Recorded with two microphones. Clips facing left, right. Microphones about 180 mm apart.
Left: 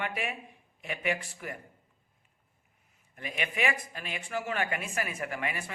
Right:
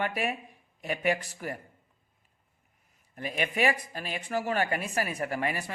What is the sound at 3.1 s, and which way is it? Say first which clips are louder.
Speech: right 4 dB; 40° right (ahead or behind).